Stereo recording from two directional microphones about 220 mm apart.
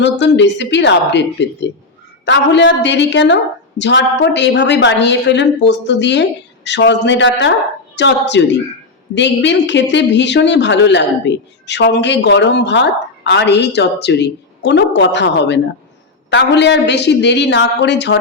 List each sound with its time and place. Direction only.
0.0 s speech: 55° left (ahead or behind)